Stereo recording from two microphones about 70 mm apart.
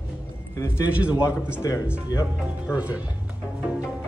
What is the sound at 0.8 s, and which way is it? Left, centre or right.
Speech, right.